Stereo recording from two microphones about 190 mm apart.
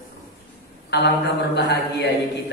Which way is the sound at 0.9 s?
60° left (ahead or behind).